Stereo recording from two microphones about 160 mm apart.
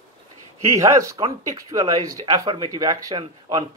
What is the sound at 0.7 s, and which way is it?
Speech, 20° right (ahead or behind).